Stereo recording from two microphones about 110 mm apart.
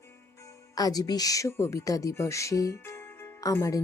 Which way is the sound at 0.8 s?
35° left (ahead or behind).